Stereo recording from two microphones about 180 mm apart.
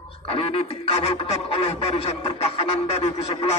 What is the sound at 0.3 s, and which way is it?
Speech, 30° left (ahead or behind).